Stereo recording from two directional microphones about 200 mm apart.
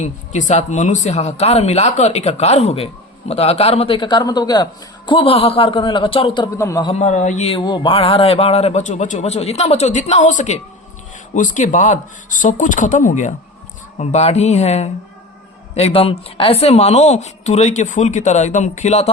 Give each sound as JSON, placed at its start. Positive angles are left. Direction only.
{"t": 0.0, "sound": "speech", "side_deg": 35}
{"t": 6.8, "sound": "a man's voice", "side_deg": 35}